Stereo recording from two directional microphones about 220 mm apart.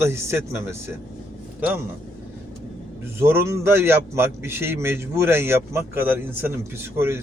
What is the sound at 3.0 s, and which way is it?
A man's voice, 10° right (ahead or behind).